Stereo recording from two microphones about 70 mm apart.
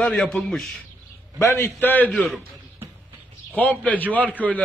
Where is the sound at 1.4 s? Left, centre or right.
Left.